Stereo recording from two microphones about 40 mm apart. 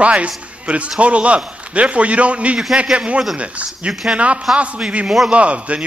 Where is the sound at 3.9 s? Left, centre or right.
Centre.